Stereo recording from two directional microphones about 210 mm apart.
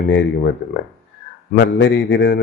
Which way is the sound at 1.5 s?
60° left (ahead or behind).